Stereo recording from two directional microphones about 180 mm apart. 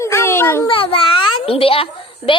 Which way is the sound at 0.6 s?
30° left (ahead or behind).